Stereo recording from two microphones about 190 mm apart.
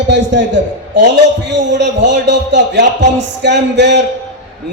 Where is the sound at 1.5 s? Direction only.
65° right (ahead or behind).